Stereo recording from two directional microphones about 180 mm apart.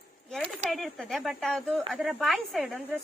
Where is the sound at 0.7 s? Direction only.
Centre (ahead or behind).